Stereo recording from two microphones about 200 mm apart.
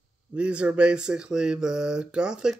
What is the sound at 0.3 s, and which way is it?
Speech, 5° right (ahead or behind).